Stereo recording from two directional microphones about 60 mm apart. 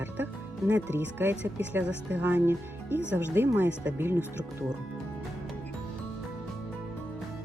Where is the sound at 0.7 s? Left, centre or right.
Right.